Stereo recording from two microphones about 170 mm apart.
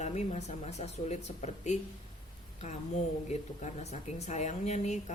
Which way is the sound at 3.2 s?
40° left (ahead or behind).